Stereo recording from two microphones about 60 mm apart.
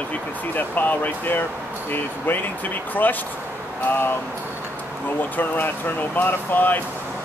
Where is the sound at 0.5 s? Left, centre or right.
Left.